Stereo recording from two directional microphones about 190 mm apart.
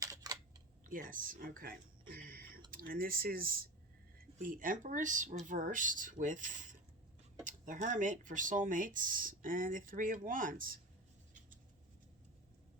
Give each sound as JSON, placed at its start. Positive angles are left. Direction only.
{"t": 0.0, "sound": "camera", "side_deg": -20}
{"t": 0.9, "sound": "speech", "side_deg": -45}